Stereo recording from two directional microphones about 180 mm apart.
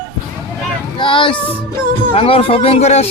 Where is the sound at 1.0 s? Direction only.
25° left (ahead or behind).